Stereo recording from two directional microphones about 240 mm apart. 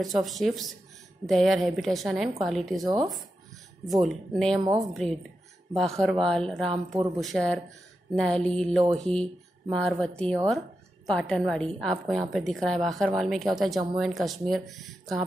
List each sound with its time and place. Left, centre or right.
0.0 s a woman's voice: centre
2.8 s speech: centre
3.8 s a woman's voice: centre